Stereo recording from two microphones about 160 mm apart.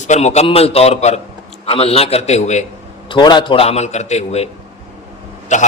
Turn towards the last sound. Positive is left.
turn(degrees=50)  # may be behind; listen again after turning